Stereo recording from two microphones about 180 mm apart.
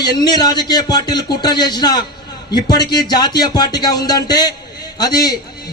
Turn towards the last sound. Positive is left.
turn(degrees=20)  # may be behind; listen again after turning